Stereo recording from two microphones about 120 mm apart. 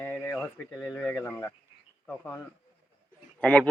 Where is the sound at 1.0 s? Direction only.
20° left (ahead or behind).